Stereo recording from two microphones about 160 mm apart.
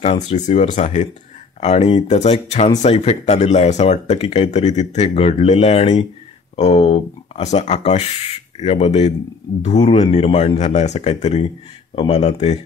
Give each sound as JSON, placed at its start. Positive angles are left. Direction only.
{"t": 0.0, "sound": "speech", "side_deg": 40}